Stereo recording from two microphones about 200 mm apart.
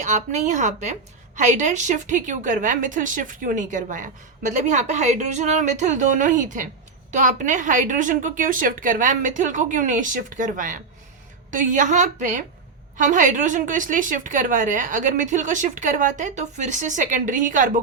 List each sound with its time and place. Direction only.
0.0 s a woman's voice: 35° right (ahead or behind)